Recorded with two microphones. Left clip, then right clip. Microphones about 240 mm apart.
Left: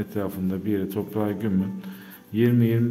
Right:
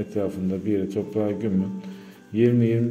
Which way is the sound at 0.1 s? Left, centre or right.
Centre.